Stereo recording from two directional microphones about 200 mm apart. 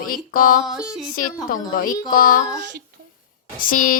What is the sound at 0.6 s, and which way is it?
Music, centre (ahead or behind).